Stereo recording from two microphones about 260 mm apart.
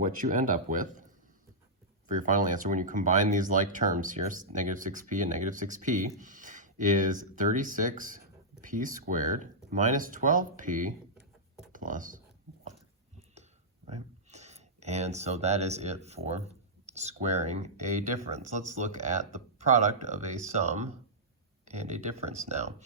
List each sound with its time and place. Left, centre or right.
0.0 s speech: right
2.0 s speech: right
13.8 s speech: right